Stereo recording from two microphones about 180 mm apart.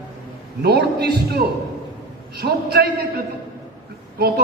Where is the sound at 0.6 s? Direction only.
65° right (ahead or behind).